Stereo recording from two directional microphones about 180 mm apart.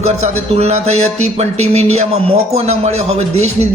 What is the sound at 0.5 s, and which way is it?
Speech, 35° right (ahead or behind).